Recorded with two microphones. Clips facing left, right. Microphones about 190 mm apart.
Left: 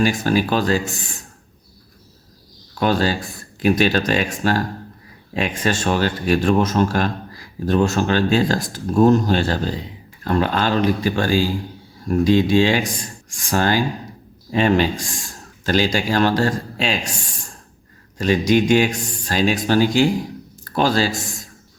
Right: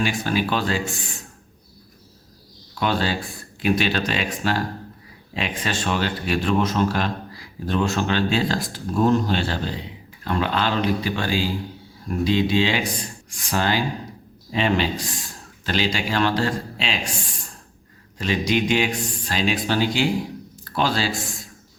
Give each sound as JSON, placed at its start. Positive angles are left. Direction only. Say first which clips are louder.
{"t": 0.0, "sound": "speech", "louder": "left 5 dB", "side_deg": 40}
{"t": 2.7, "sound": "speech", "louder": "left 4 dB", "side_deg": 45}
{"t": 18.2, "sound": "speech", "louder": "left 6 dB", "side_deg": 45}